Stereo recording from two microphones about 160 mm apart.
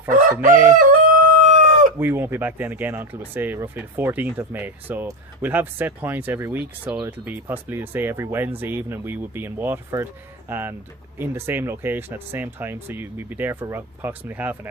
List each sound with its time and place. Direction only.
0.1 s crowing: 55° right (ahead or behind)
0.7 s chicken: 55° right (ahead or behind)
2.0 s speech: 15° right (ahead or behind)